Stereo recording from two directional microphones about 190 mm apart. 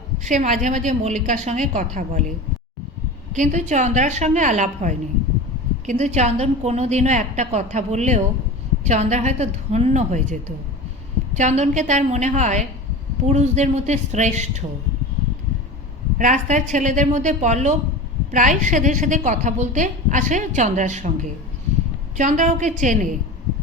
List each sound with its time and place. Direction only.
0.3 s a woman's voice: 40° right (ahead or behind)
3.3 s a woman's voice: 40° right (ahead or behind)
11.3 s a woman's voice: 35° right (ahead or behind)
16.1 s a woman's voice: 40° right (ahead or behind)